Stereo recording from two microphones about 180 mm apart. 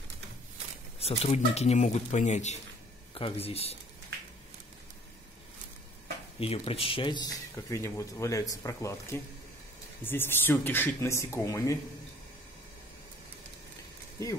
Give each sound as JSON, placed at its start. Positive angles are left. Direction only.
{"t": 0.9, "sound": "speech", "side_deg": 35}
{"t": 6.4, "sound": "speech", "side_deg": 30}
{"t": 7.7, "sound": "speech", "side_deg": 15}